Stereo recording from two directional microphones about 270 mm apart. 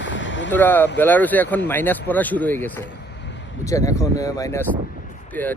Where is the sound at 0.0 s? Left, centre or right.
Left.